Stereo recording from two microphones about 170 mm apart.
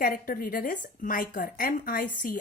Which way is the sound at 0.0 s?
55° left (ahead or behind).